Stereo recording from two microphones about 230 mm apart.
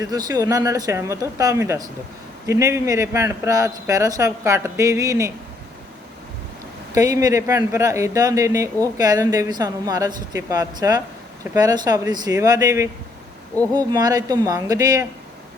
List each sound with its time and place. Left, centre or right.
0.0 s speech: centre
6.9 s speech: centre